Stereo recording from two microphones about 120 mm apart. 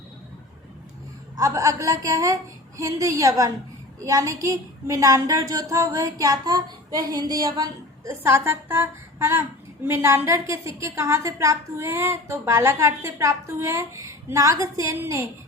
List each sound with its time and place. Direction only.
1.4 s a woman's voice: 30° right (ahead or behind)